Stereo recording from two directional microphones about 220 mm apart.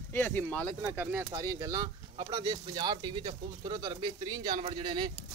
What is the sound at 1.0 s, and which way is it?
Speech, 10° right (ahead or behind).